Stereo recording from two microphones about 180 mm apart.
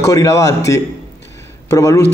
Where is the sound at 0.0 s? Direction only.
15° left (ahead or behind).